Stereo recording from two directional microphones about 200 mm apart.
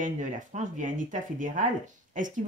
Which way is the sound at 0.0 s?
40° right (ahead or behind).